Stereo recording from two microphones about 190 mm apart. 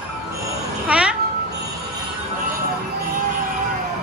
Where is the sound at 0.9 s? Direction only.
5° right (ahead or behind).